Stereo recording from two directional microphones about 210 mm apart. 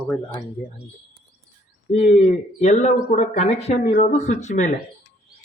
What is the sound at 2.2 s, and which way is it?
Speech, 30° left (ahead or behind).